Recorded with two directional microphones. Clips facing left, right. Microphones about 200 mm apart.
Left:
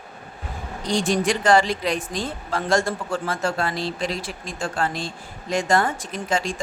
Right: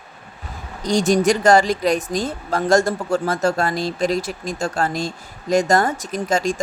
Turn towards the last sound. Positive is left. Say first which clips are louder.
# right 5 dB
turn(degrees=-40)  # may be behind; listen again after turning